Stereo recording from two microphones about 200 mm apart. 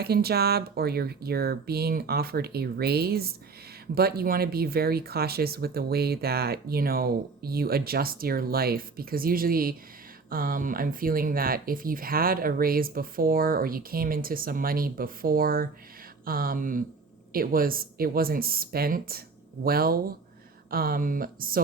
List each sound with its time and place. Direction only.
0.0 s speech: 50° right (ahead or behind)